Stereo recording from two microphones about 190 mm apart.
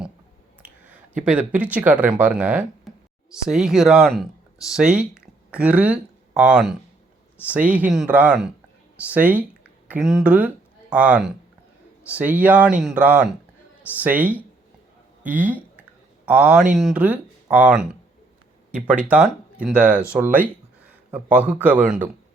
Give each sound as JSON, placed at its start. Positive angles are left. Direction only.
{"t": 0.6, "sound": "speech", "side_deg": -5}